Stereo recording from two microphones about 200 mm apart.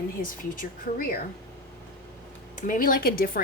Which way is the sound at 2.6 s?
45° left (ahead or behind).